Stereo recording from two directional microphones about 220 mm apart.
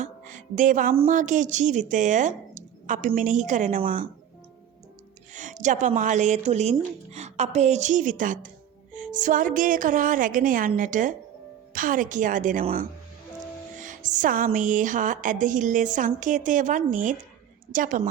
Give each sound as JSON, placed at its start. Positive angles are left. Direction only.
{"t": 0.0, "sound": "music", "side_deg": -35}
{"t": 1.0, "sound": "speech", "side_deg": -35}
{"t": 5.3, "sound": "speech", "side_deg": -35}